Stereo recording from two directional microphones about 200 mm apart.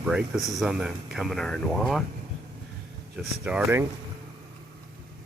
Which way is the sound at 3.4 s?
10° right (ahead or behind).